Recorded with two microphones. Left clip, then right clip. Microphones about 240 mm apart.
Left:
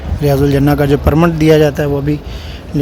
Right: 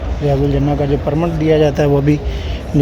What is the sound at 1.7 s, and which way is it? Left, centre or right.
Speech, centre.